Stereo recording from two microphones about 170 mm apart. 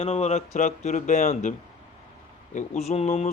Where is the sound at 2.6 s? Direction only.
40° left (ahead or behind).